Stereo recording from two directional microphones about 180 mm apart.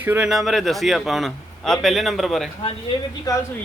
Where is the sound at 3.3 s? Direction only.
20° left (ahead or behind).